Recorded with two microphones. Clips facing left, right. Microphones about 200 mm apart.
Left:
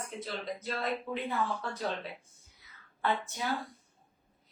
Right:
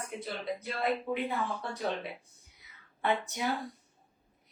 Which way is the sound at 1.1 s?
15° right (ahead or behind).